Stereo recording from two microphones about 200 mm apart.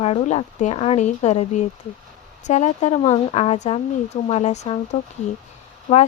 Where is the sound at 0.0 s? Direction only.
30° left (ahead or behind).